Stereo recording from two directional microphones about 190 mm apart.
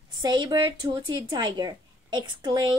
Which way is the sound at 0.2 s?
25° right (ahead or behind).